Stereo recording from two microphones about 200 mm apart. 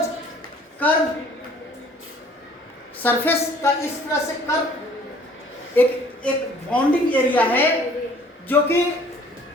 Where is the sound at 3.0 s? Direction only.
10° left (ahead or behind).